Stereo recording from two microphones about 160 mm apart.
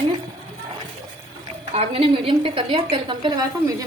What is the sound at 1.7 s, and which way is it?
A woman's voice, 40° right (ahead or behind).